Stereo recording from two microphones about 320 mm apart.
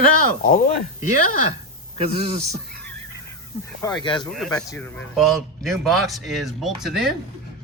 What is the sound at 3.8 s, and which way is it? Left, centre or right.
Speech, centre.